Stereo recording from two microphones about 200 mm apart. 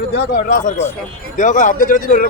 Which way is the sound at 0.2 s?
45° left (ahead or behind).